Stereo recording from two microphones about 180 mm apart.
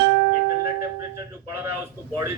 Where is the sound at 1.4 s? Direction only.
15° right (ahead or behind).